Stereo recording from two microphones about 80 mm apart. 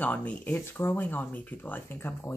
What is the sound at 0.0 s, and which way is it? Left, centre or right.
Speech, centre.